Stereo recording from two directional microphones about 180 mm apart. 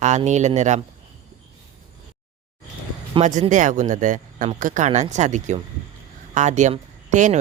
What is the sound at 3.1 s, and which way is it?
Speech, 40° right (ahead or behind).